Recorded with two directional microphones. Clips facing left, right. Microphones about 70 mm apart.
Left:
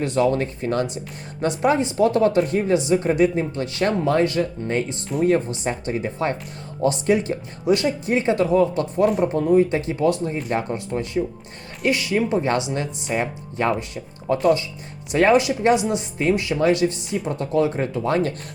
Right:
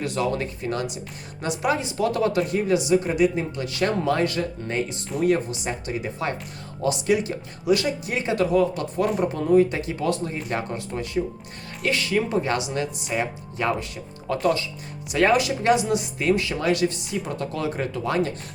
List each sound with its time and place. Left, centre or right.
0.0 s speech: left
12.4 s speech: left